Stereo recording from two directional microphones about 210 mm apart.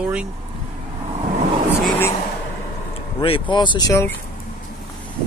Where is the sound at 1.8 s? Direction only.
10° left (ahead or behind).